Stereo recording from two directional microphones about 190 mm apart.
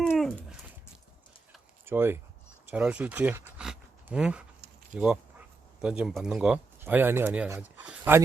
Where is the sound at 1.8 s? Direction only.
10° right (ahead or behind).